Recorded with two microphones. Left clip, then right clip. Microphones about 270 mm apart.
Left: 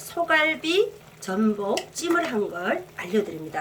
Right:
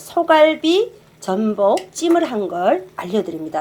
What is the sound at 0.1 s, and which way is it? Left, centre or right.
Speech, centre.